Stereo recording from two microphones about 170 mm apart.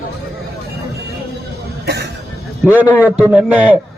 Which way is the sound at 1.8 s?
75° right (ahead or behind).